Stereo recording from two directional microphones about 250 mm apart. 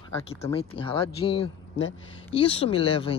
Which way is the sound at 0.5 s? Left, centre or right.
Left.